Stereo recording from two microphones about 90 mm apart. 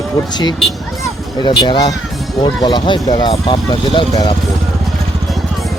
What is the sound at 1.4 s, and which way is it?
Speech, 55° left (ahead or behind).